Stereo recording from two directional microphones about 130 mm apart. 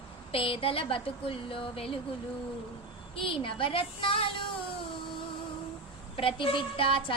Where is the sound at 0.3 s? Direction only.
45° left (ahead or behind).